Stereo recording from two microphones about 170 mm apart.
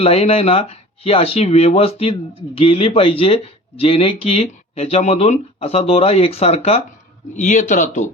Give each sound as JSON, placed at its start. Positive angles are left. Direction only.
{"t": 0.0, "sound": "speech", "side_deg": 35}
{"t": 7.3, "sound": "speech", "side_deg": 45}